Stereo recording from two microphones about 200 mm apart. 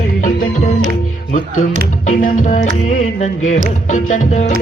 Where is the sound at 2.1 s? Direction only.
40° left (ahead or behind).